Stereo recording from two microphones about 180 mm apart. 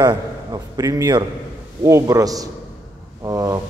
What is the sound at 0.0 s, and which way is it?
A man's voice, 20° right (ahead or behind).